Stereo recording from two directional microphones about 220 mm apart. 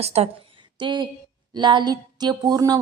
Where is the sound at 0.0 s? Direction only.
30° right (ahead or behind).